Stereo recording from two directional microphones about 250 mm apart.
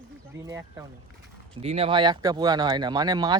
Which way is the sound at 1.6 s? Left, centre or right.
Right.